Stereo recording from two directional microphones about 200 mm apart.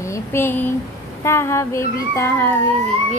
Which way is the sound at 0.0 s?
15° left (ahead or behind).